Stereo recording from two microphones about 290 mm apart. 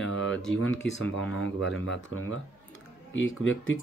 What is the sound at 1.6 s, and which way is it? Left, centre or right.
Speech, left.